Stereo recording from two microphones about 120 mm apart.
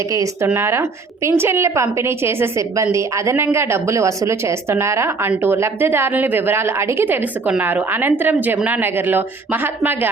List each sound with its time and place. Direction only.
0.4 s a woman's voice: 20° right (ahead or behind)